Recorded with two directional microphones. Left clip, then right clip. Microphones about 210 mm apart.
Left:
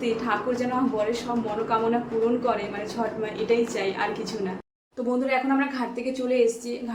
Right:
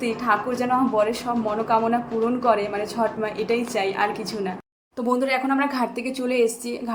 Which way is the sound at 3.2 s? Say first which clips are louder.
Even; 35° right (ahead or behind).